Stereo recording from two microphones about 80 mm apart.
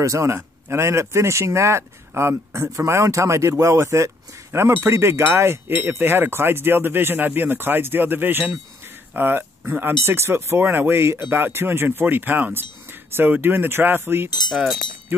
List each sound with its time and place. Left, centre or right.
0.0 s speech: right
14.5 s speech: centre